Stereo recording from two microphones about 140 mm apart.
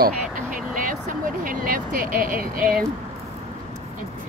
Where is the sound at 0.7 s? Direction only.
70° right (ahead or behind).